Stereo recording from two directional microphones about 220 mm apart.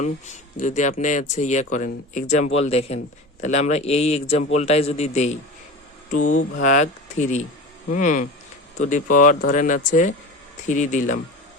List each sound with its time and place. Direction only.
0.0 s speech: 35° left (ahead or behind)
6.6 s speech: 35° left (ahead or behind)